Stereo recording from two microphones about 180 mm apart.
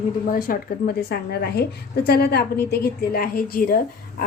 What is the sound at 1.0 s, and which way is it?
A woman's voice, 60° left (ahead or behind).